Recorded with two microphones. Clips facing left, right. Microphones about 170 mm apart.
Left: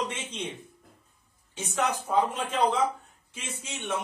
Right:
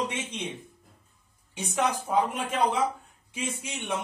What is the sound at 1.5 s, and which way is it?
A man's voice, 10° right (ahead or behind).